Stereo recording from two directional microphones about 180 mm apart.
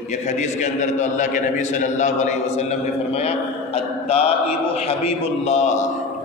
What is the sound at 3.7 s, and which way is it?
Mantra, 35° left (ahead or behind).